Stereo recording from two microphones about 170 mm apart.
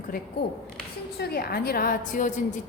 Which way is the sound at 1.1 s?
70° left (ahead or behind).